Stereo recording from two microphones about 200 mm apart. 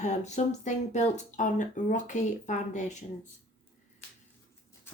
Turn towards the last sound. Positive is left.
turn(degrees=35)  # may be behind; listen again after turning